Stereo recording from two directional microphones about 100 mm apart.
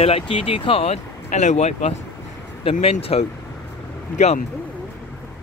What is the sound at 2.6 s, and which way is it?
Speech, 70° left (ahead or behind).